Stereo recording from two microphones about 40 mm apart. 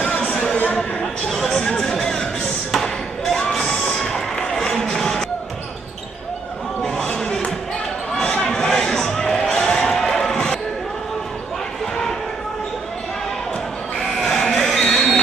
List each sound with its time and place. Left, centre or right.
0.1 s a sound: left
0.7 s speech: centre
1.9 s music: centre
2.7 s thump: centre
3.5 s children shouting: centre
3.9 s music: centre
6.8 s a sound: centre
9.3 s basketball bounce: centre
14.1 s a sound: centre